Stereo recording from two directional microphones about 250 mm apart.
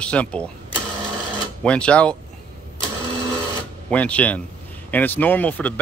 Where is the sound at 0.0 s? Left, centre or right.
Centre.